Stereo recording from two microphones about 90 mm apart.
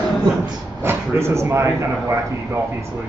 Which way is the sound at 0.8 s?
30° right (ahead or behind).